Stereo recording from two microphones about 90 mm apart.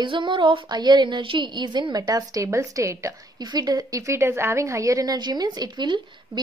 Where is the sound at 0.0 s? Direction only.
65° right (ahead or behind); by 3.4 s 35° right (ahead or behind).